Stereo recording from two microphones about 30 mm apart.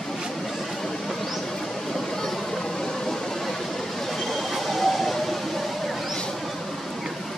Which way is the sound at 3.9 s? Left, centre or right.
Centre.